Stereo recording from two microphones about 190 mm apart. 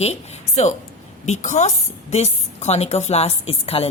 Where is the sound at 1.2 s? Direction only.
40° left (ahead or behind).